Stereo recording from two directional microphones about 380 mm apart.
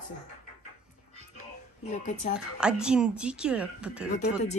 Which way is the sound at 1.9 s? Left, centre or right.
Centre.